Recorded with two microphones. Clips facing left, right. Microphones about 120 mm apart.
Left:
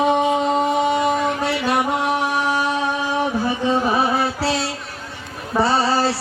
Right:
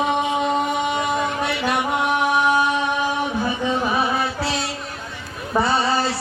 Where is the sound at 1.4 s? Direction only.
35° left (ahead or behind).